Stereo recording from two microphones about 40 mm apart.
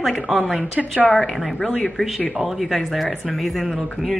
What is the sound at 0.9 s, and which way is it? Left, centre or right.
Speech, left.